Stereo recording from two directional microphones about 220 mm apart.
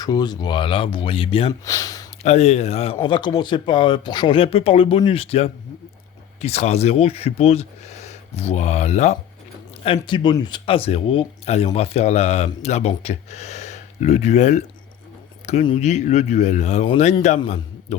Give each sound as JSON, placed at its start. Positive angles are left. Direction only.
{"t": 0.0, "sound": "speech", "side_deg": 20}
{"t": 2.2, "sound": "a man's voice", "side_deg": 30}